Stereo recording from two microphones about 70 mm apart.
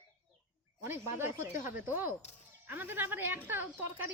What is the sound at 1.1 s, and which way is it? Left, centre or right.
A woman's voice, right.